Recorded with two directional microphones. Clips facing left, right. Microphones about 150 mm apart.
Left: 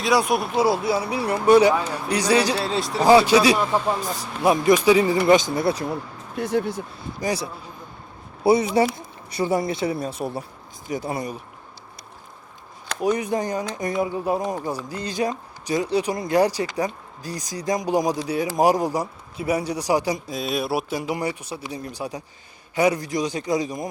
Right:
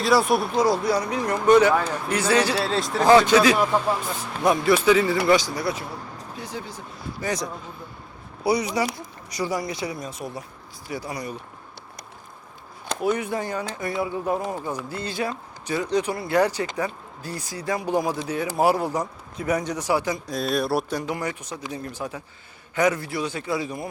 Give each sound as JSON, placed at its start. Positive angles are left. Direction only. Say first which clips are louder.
{"t": 0.0, "sound": "speech", "louder": "right 1 dB", "side_deg": 0}
{"t": 2.6, "sound": "speech", "louder": "even", "side_deg": 0}
{"t": 6.3, "sound": "speech", "louder": "left 13 dB", "side_deg": 60}
{"t": 7.2, "sound": "speech", "louder": "left 2 dB", "side_deg": 10}
{"t": 8.4, "sound": "speech", "louder": "left 5 dB", "side_deg": 25}
{"t": 13.0, "sound": "speech", "louder": "left 3 dB", "side_deg": 15}
{"t": 20.2, "sound": "speech", "louder": "right 1 dB", "side_deg": 0}